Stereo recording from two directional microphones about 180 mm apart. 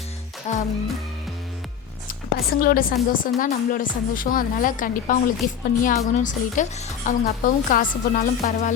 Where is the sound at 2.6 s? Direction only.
55° left (ahead or behind).